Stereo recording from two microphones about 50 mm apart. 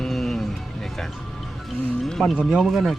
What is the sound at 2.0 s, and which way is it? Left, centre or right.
Speech, centre.